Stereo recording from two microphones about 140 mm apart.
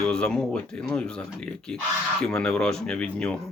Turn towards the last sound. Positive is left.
turn(degrees=10)  # may be behind; listen again after turning